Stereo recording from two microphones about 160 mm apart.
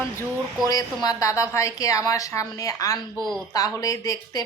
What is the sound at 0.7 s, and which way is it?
A woman's voice, 25° left (ahead or behind).